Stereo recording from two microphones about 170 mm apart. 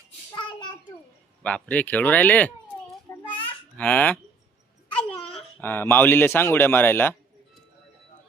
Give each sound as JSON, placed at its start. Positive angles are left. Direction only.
{"t": 0.3, "sound": "child singing", "side_deg": 25}
{"t": 1.4, "sound": "speech", "side_deg": 10}
{"t": 3.1, "sound": "a sound", "side_deg": 15}
{"t": 3.8, "sound": "speech", "side_deg": 10}
{"t": 5.6, "sound": "speech", "side_deg": 10}